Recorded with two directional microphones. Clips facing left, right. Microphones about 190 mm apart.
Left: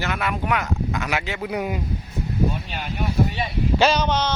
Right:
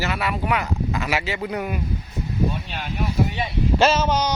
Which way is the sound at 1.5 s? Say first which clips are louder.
Left 1 dB; 15° left (ahead or behind).